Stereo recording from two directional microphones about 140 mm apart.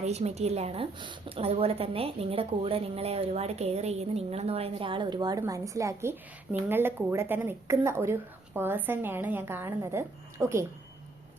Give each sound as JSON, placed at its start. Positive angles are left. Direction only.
{"t": 0.0, "sound": "a woman's voice", "side_deg": -50}